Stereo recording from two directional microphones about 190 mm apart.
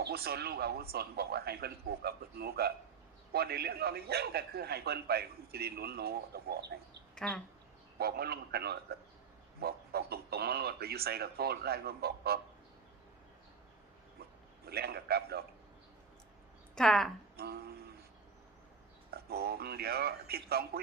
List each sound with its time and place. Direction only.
0.0 s a man's voice: 55° right (ahead or behind)
7.2 s speech: 5° left (ahead or behind)
7.9 s a man's voice: 55° right (ahead or behind)
14.6 s a man's voice: 55° right (ahead or behind)
16.7 s speech: centre (ahead or behind)
17.3 s a sound: 55° right (ahead or behind)
19.1 s a man's voice: 55° right (ahead or behind)